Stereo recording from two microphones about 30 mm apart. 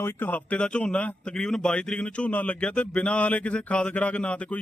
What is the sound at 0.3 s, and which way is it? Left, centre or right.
Speech, left.